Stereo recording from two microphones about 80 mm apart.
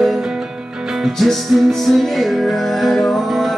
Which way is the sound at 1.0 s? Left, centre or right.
Centre.